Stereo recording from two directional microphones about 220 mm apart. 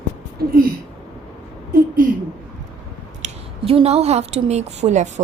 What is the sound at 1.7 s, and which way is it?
Speech, 40° right (ahead or behind).